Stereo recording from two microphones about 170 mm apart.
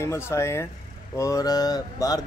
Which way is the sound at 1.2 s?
20° left (ahead or behind).